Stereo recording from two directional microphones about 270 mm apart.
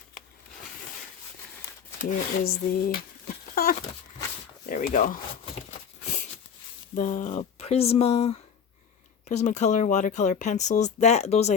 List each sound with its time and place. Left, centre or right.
2.0 s speech: left
6.9 s speech: left